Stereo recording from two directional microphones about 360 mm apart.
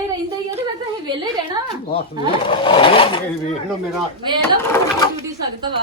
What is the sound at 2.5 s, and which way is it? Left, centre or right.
Speech, centre.